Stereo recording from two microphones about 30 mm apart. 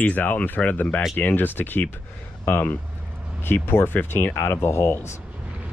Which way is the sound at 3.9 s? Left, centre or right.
Left.